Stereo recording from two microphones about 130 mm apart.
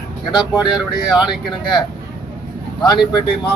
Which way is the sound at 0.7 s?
5° right (ahead or behind).